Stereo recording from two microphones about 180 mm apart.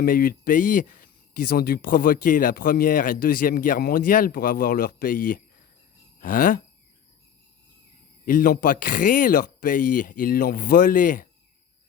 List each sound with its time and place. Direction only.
0.0 s speech: 50° left (ahead or behind)
8.2 s speech: 50° left (ahead or behind)